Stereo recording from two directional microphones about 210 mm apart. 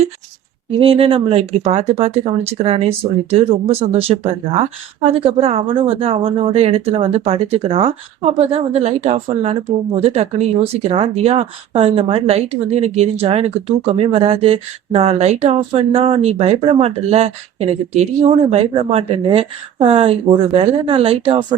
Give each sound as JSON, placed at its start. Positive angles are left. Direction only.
{"t": 0.8, "sound": "speech", "side_deg": -25}